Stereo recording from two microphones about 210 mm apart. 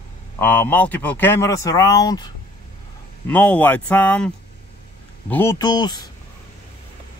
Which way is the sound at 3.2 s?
5° left (ahead or behind).